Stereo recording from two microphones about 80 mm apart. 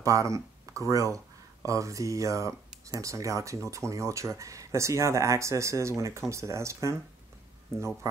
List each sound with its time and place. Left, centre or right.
0.0 s speech: right